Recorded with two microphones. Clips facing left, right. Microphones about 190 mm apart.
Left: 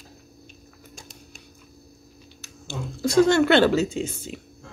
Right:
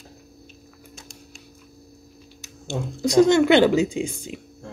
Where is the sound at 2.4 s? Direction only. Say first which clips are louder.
Right 5 dB; 20° right (ahead or behind).